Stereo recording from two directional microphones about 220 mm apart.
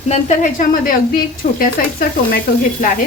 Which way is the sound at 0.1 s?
35° left (ahead or behind).